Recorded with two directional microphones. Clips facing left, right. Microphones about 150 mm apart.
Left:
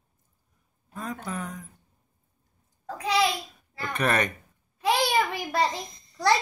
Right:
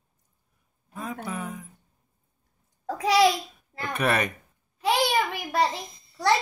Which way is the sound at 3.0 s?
90° right.